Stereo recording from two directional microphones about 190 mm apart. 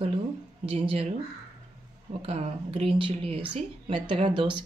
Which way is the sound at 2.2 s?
30° right (ahead or behind).